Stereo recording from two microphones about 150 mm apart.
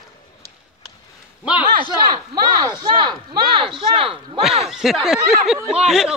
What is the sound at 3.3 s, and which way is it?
Speech, 35° right (ahead or behind).